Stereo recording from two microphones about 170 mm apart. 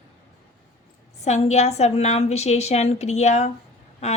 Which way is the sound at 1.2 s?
40° left (ahead or behind).